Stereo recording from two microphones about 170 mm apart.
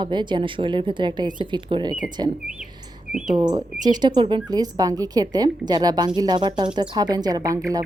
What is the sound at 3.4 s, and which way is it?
A woman's voice, 25° right (ahead or behind).